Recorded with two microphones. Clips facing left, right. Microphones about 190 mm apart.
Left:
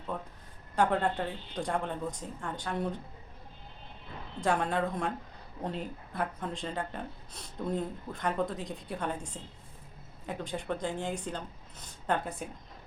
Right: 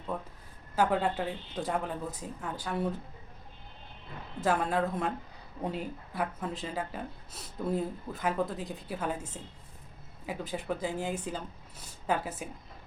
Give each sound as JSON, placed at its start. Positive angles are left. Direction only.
{"t": 0.1, "sound": "speech", "side_deg": -5}
{"t": 4.4, "sound": "speech", "side_deg": -5}